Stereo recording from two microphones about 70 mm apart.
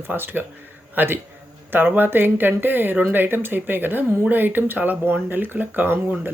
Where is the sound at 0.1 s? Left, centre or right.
Right.